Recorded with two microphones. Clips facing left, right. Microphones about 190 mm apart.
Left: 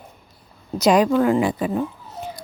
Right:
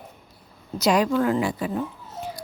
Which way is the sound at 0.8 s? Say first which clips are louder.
Left 4 dB; 20° left (ahead or behind).